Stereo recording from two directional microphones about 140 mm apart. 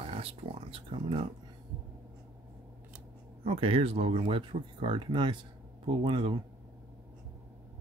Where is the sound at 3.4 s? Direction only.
45° right (ahead or behind).